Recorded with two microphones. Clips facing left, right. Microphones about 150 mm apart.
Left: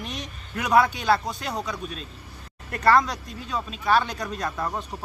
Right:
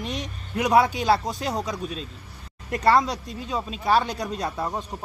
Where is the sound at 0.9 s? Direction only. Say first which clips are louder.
Right 1 dB; 30° right (ahead or behind).